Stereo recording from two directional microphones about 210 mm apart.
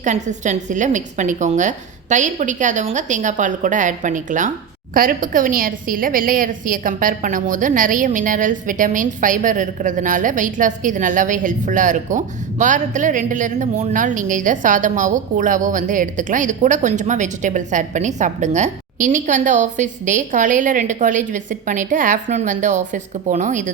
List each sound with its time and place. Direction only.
0.0 s a woman's voice: 35° right (ahead or behind)